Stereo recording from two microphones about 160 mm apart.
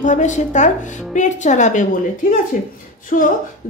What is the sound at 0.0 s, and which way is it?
A woman's voice, 50° left (ahead or behind).